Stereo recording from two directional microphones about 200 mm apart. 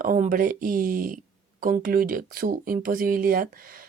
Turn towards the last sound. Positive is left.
turn(degrees=-45)  # may be behind; listen again after turning